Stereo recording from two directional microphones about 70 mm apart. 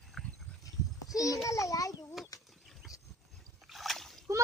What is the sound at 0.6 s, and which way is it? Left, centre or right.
Goat, left.